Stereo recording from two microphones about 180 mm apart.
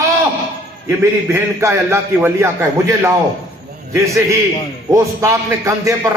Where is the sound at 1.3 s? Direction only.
15° right (ahead or behind).